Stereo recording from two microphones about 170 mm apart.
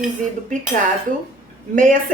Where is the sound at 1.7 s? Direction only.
50° right (ahead or behind).